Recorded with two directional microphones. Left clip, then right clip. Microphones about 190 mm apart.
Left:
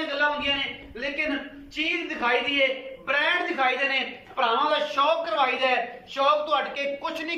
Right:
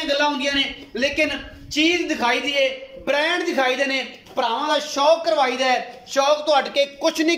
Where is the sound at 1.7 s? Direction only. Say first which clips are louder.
Right 8 dB; 40° right (ahead or behind).